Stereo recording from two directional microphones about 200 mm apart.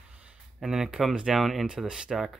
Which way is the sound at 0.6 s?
Centre (ahead or behind).